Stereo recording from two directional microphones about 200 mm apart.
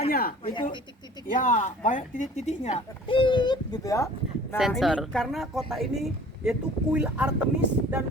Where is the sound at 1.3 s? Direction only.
40° left (ahead or behind); by 4.1 s 15° left (ahead or behind).